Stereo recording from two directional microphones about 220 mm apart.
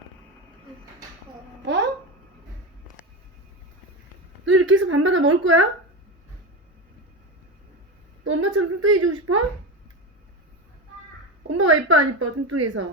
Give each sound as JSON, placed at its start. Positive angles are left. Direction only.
{"t": 1.6, "sound": "a sound", "side_deg": -50}
{"t": 4.5, "sound": "a woman's voice", "side_deg": -60}
{"t": 8.2, "sound": "a woman's voice", "side_deg": -65}
{"t": 11.5, "sound": "a woman's voice", "side_deg": -90}